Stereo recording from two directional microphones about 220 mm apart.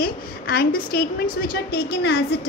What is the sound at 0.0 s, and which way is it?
A woman's voice, 45° left (ahead or behind).